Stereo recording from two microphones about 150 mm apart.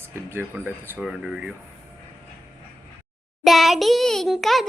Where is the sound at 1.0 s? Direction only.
5° right (ahead or behind).